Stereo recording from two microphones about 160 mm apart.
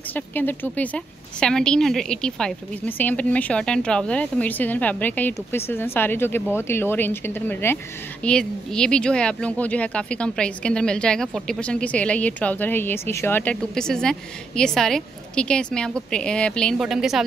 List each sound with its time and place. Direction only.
0.1 s a woman's voice: 10° left (ahead or behind)